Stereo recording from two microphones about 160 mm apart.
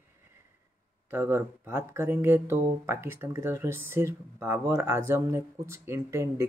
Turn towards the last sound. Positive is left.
turn(degrees=-20)  # may be behind; listen again after turning